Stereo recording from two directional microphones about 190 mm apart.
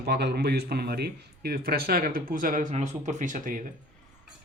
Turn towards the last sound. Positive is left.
turn(degrees=-45)  # may be behind; listen again after turning